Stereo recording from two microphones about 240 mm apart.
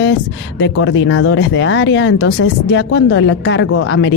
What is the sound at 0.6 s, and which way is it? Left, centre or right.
Speech, left.